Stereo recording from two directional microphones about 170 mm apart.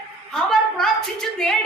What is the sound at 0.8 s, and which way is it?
Speech, 5° left (ahead or behind).